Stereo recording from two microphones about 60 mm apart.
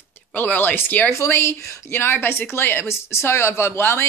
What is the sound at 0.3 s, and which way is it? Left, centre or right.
Speech, left.